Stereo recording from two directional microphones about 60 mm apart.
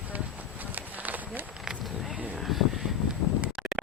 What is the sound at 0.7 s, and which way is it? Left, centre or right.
Run, right.